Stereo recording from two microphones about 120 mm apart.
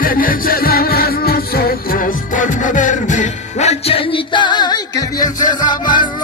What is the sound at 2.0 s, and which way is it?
Music, 90° left.